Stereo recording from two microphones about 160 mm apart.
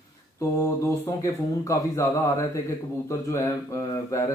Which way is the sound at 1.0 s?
20° left (ahead or behind).